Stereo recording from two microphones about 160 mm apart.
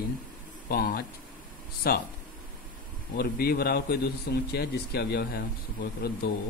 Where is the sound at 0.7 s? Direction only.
65° left (ahead or behind).